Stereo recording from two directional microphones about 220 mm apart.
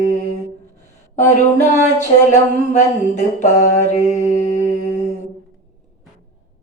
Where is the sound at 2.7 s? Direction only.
35° left (ahead or behind).